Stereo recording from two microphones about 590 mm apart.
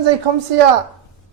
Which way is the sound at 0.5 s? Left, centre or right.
Right.